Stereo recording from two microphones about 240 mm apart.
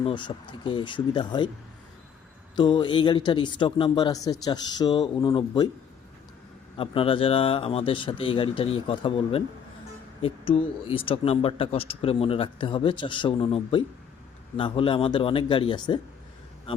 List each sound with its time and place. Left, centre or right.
0.0 s speech: centre
2.6 s speech: centre
6.7 s speech: left